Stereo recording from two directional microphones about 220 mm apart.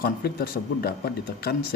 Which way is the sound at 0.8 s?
45° left (ahead or behind).